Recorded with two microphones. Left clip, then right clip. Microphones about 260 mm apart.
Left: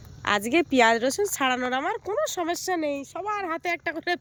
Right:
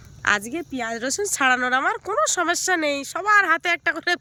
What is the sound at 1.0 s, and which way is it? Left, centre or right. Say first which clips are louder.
Speech: right 1 dB; centre.